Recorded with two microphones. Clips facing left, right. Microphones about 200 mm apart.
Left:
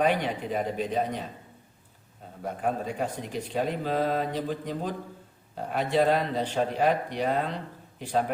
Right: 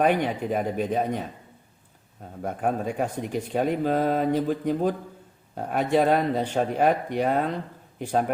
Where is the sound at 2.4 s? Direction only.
50° right (ahead or behind).